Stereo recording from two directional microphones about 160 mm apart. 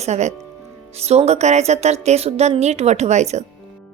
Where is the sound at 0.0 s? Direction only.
45° right (ahead or behind).